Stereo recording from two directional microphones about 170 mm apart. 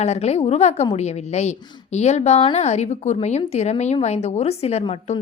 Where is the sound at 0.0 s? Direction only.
40° left (ahead or behind).